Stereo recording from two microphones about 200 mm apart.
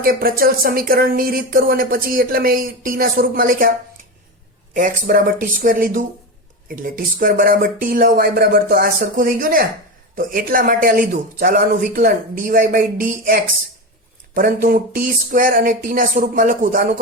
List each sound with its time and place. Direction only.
0.0 s speech: 45° right (ahead or behind)